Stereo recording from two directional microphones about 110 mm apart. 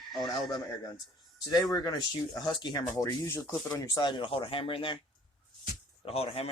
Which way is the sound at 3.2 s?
25° left (ahead or behind).